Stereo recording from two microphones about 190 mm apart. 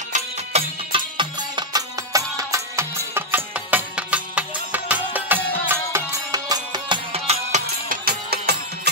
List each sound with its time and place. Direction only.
0.1 s music: 30° right (ahead or behind)
7.6 s music: 55° right (ahead or behind)